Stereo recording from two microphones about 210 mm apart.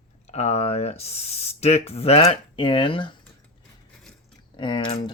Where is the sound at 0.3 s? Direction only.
30° left (ahead or behind).